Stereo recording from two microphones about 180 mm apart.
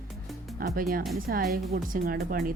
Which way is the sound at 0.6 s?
55° right (ahead or behind).